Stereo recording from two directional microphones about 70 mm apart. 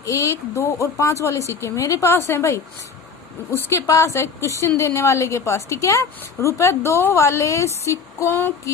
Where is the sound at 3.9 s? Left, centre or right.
Left.